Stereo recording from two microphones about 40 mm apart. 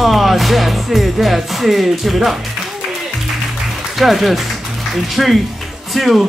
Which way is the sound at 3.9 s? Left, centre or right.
Centre.